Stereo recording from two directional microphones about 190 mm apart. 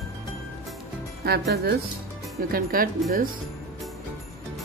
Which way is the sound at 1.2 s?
55° right (ahead or behind).